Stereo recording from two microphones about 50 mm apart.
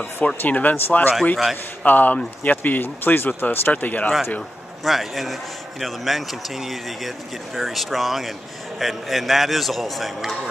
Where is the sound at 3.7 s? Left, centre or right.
Left.